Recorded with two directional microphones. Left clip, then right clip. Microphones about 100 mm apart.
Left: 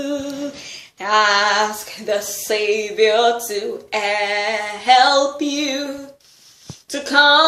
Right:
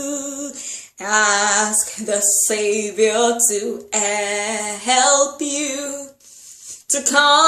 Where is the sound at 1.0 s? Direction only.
20° right (ahead or behind).